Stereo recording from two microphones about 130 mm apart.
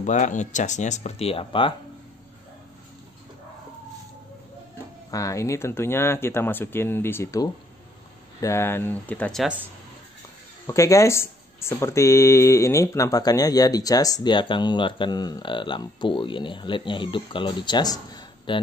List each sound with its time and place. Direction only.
0.0 s speech: 70° left (ahead or behind); by 1.7 s 45° left (ahead or behind)
5.1 s speech: 25° left (ahead or behind)
10.7 s speech: 25° left (ahead or behind)